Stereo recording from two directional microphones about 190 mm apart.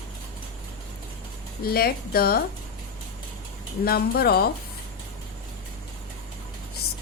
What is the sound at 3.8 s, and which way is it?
Speech, 55° left (ahead or behind).